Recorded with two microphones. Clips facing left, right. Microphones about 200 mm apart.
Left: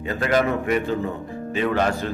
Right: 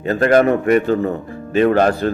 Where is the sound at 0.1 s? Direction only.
50° right (ahead or behind).